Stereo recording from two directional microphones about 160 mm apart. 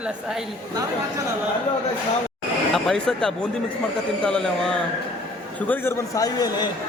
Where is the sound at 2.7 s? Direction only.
Centre (ahead or behind); by 6.7 s 25° left (ahead or behind).